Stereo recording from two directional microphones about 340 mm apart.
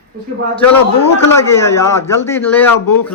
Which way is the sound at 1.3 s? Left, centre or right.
Centre.